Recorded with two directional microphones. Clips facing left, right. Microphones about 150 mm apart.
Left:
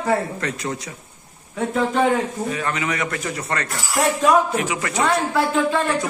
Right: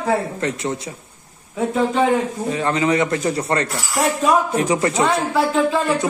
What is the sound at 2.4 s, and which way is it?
A man's voice, 30° right (ahead or behind).